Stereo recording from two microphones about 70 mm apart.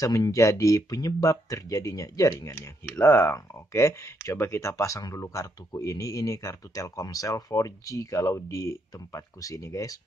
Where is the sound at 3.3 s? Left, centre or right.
Left.